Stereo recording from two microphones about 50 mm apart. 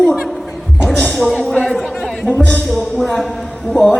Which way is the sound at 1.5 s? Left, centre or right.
Left.